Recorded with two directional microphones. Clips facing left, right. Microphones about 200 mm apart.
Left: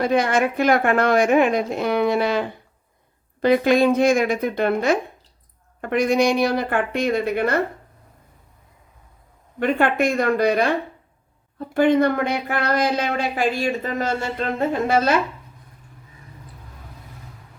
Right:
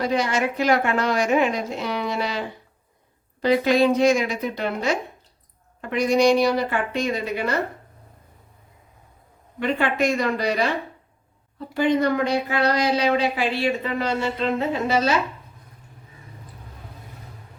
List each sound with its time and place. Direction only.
0.0 s a woman's voice: 55° left (ahead or behind)
9.6 s speech: 55° left (ahead or behind)
11.7 s speech: 55° left (ahead or behind)